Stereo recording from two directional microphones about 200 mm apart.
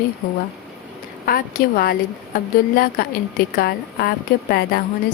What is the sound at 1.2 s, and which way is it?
A woman's voice, 50° left (ahead or behind).